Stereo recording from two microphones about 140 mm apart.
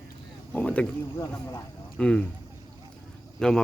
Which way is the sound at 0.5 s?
10° left (ahead or behind).